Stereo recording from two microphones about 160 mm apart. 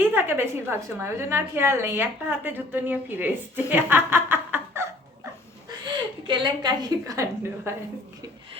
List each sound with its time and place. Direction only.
0.0 s a woman's voice: 15° right (ahead or behind)
3.7 s a sound: 15° right (ahead or behind)
5.8 s a woman's voice: 30° right (ahead or behind)